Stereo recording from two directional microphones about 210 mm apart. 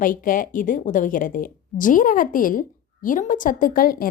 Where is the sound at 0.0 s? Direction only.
40° left (ahead or behind).